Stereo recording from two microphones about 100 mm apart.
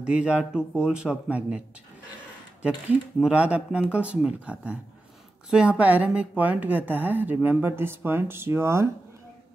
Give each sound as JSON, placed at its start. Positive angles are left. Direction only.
{"t": 0.0, "sound": "speech", "side_deg": -10}
{"t": 3.2, "sound": "a woman's voice", "side_deg": -10}